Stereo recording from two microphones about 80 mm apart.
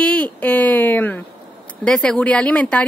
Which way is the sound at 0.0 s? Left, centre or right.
Centre.